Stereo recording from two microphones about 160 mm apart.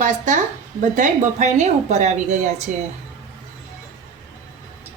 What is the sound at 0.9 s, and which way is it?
A woman's voice, 50° right (ahead or behind).